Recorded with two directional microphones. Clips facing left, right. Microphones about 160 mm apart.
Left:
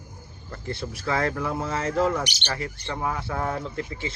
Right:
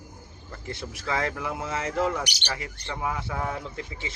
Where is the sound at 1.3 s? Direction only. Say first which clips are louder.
Left 4 dB; 10° right (ahead or behind).